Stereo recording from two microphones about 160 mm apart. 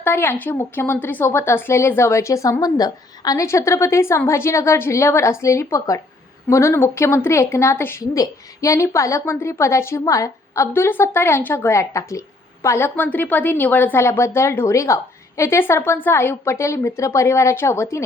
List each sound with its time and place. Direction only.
0.0 s a woman's voice: 15° left (ahead or behind)